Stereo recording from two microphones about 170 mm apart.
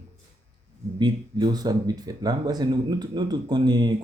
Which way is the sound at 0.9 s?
25° right (ahead or behind).